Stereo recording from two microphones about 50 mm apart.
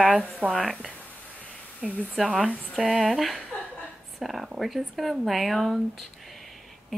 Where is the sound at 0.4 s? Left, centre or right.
Left.